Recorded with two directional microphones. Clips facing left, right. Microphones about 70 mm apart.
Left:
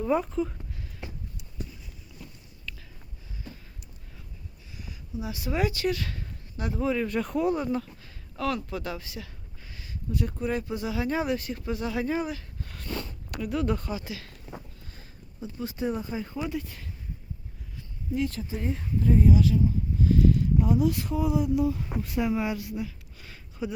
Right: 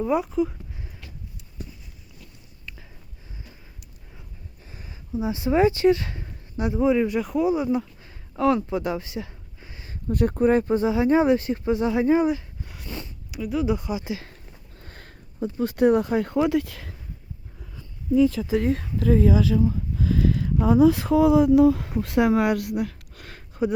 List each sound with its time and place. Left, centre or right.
0.0 s speech: centre
1.0 s clip-clop: left
2.7 s a sound: centre
4.7 s speech: right; by 7.9 s centre
8.0 s a sound: right
10.1 s speech: right
12.6 s speech: centre; by 14.3 s right
14.8 s speech: right
18.4 s speech: right
21.2 s speech: right